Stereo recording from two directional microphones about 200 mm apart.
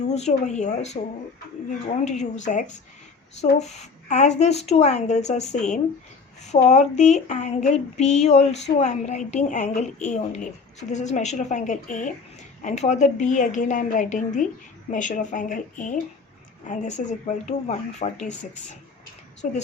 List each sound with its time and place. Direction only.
0.0 s child singing: 35° left (ahead or behind)